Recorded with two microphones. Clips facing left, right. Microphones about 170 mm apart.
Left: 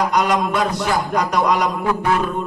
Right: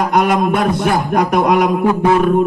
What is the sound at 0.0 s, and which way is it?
A man's voice, 55° right (ahead or behind).